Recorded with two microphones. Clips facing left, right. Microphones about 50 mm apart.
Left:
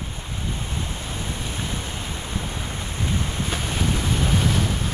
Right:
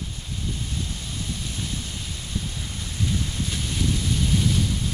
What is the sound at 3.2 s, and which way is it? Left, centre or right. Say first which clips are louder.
Waves: left 3 dB; left.